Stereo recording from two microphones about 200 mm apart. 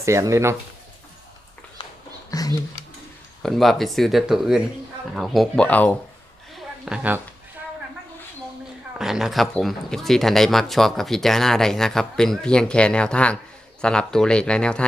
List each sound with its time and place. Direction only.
0.0 s speech: 15° right (ahead or behind)
2.3 s a sound: 15° left (ahead or behind)
3.4 s speech: centre (ahead or behind)
6.8 s speech: 5° right (ahead or behind)
9.0 s speech: centre (ahead or behind)